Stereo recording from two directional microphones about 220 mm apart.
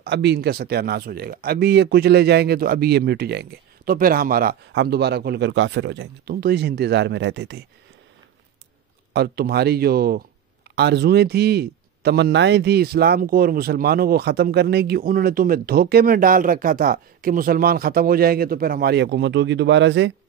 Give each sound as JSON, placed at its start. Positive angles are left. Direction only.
{"t": 0.0, "sound": "a man's voice", "side_deg": -50}
{"t": 9.1, "sound": "a man's voice", "side_deg": -45}